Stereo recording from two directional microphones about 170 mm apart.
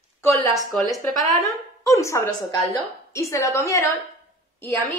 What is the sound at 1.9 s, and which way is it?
A woman's voice, 20° left (ahead or behind).